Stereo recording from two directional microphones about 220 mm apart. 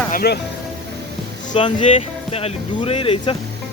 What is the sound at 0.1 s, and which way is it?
Speech, 45° left (ahead or behind).